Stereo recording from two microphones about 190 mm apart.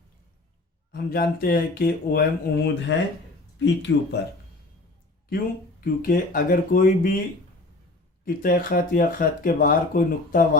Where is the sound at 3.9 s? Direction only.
75° left (ahead or behind).